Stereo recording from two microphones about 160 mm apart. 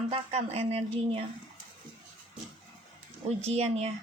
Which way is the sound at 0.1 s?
40° right (ahead or behind).